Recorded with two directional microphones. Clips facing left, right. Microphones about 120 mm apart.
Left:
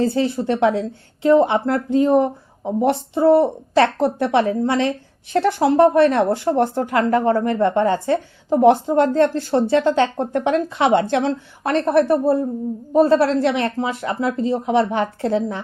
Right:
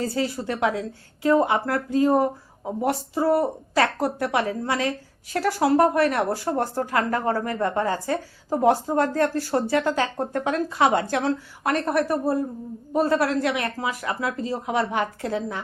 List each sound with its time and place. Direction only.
0.0 s speech: 25° left (ahead or behind)